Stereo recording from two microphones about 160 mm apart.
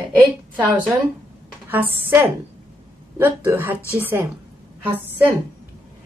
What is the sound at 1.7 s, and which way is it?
A woman's voice, 10° right (ahead or behind).